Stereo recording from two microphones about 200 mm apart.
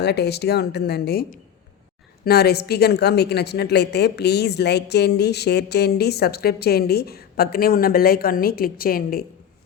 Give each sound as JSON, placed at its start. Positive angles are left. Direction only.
{"t": 0.0, "sound": "a woman's voice", "side_deg": 55}